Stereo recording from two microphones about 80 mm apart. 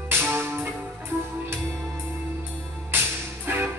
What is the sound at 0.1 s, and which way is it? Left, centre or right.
Music, right.